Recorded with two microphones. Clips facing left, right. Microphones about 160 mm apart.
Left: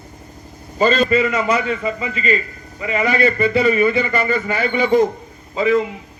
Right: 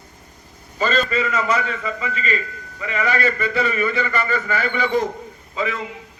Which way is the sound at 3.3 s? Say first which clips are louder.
Left 6 dB; 35° left (ahead or behind).